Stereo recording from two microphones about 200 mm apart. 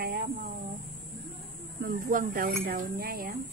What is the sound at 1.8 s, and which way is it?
Speech, 45° right (ahead or behind).